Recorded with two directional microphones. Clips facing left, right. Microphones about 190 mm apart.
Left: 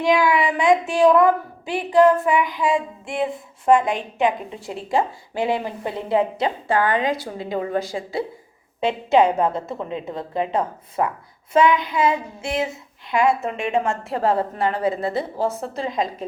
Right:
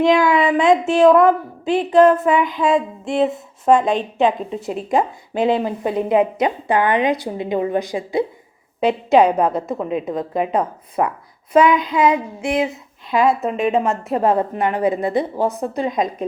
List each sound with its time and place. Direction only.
0.0 s a child's voice: 20° right (ahead or behind)